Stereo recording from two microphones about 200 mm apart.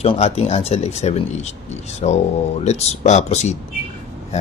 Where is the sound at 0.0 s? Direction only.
30° left (ahead or behind).